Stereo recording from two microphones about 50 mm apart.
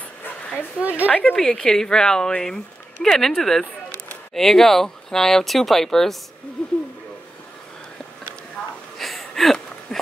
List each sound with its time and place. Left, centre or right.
0.7 s a woman's voice: right
1.3 s speech: centre
8.9 s a sound: centre